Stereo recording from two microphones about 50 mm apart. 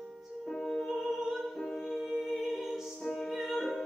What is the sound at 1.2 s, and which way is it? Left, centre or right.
Music, centre.